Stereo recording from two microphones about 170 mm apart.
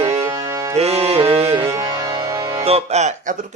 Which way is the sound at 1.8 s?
20° right (ahead or behind).